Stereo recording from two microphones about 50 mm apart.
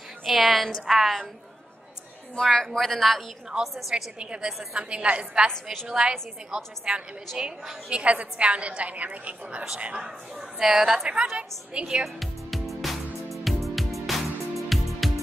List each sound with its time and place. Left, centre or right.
0.2 s a woman's voice: centre
2.3 s a woman's voice: centre
4.2 s a woman's voice: centre
11.1 s a woman's voice: right
11.8 s speech: centre
12.2 s music: centre